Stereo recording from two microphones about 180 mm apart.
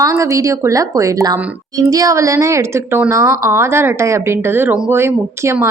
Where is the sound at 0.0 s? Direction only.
15° right (ahead or behind).